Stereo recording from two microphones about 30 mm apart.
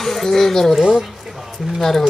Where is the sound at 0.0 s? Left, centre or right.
Centre.